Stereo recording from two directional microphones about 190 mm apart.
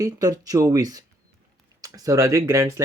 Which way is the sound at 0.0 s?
20° right (ahead or behind).